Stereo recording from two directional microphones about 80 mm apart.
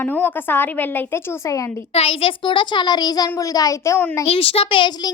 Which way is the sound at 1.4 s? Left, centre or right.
Left.